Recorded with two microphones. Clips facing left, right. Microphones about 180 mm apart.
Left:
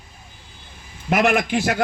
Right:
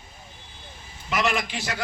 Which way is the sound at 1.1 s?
55° left (ahead or behind).